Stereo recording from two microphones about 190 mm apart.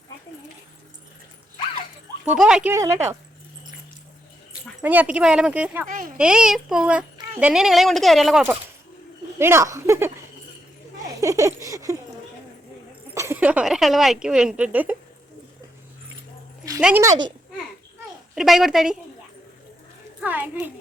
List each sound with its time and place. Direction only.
2.4 s speech: 5° right (ahead or behind)
2.7 s speech: 15° right (ahead or behind)
4.8 s speech: 10° right (ahead or behind)
5.9 s a child's voice: 45° right (ahead or behind)
6.1 s speech: 5° right (ahead or behind)
9.4 s speech: 15° right (ahead or behind)
11.0 s a sound: 15° right (ahead or behind)
13.1 s speech: 10° right (ahead or behind)
16.8 s speech: 10° right (ahead or behind)
18.3 s speech: centre (ahead or behind)
20.2 s speech: 10° right (ahead or behind)